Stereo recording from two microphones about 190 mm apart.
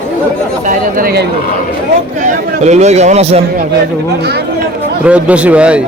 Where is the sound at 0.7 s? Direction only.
50° right (ahead or behind).